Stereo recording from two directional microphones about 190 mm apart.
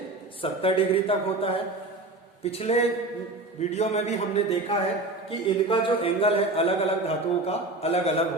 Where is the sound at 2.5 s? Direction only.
35° left (ahead or behind).